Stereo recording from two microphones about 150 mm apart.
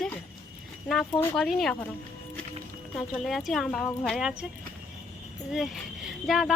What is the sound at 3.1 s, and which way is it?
Speech, centre (ahead or behind).